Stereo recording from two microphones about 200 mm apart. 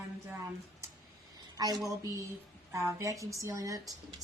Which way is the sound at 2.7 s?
15° right (ahead or behind).